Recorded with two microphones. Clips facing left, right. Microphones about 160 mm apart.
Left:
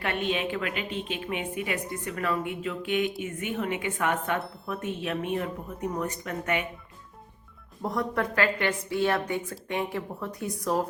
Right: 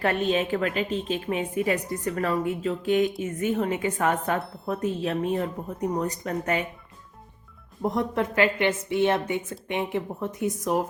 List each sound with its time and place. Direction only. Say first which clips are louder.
0.0 s a woman's voice: right 5 dB; 40° right (ahead or behind)
7.8 s a woman's voice: right 3 dB; 20° right (ahead or behind)